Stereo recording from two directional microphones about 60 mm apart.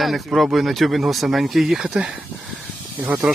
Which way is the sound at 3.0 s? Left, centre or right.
Right.